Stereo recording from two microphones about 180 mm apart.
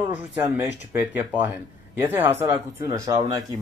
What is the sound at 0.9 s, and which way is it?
Speech, 10° right (ahead or behind).